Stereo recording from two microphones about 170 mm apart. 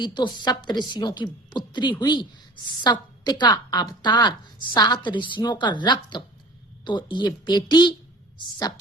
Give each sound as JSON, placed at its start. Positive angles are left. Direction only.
{"t": 0.0, "sound": "a woman's voice", "side_deg": 25}